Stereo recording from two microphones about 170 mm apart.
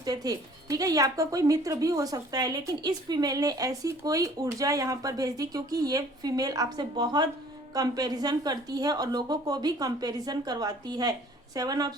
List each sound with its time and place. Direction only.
0.0 s speech: 20° right (ahead or behind)